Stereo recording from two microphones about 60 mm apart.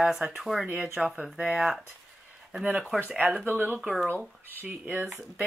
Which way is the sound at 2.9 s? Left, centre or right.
Right.